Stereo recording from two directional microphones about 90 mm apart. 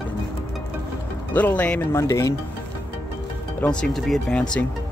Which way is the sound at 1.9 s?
35° left (ahead or behind).